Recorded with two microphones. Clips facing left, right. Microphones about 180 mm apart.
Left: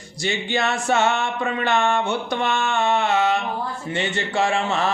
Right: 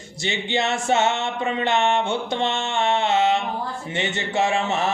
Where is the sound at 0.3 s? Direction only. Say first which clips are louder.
Even; 20° right (ahead or behind).